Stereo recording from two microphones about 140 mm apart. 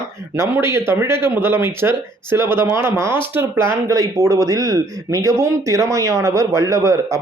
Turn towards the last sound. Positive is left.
turn(degrees=-25)  # may be behind; listen again after turning